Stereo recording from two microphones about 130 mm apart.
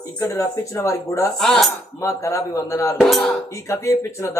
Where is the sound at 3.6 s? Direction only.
20° left (ahead or behind).